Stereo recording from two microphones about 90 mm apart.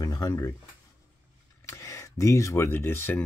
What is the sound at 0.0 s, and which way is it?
Speech, 45° left (ahead or behind).